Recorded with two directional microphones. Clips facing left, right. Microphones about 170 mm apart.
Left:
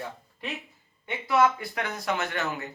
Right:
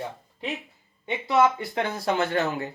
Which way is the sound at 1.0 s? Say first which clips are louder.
Right 2 dB; 25° right (ahead or behind).